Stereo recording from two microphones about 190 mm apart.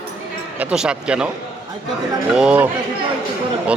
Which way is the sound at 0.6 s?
5° right (ahead or behind).